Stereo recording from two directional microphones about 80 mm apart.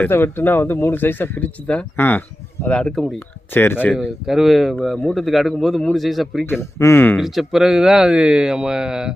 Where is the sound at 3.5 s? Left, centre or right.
Left.